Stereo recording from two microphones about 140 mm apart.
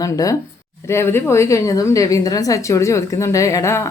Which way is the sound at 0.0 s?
25° left (ahead or behind).